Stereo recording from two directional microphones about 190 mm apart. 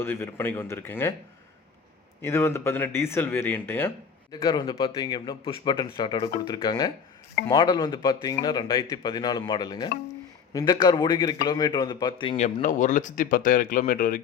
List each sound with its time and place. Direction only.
0.0 s speech: 10° left (ahead or behind)
2.2 s speech: 15° left (ahead or behind)
4.3 s a man's voice: 20° left (ahead or behind)
12.6 s speech: 40° left (ahead or behind)